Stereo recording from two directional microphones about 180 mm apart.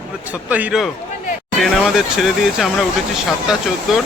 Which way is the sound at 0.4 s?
10° right (ahead or behind).